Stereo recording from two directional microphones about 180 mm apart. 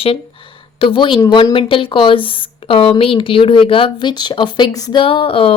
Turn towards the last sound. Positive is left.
turn(degrees=30)  # may be behind; listen again after turning